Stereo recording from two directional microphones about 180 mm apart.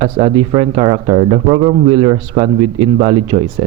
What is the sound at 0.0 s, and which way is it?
A man's voice, 30° right (ahead or behind).